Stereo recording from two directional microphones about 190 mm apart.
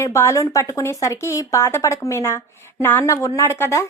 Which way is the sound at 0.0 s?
15° left (ahead or behind).